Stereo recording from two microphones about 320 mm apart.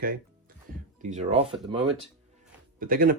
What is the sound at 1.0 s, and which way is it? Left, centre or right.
Speech, right.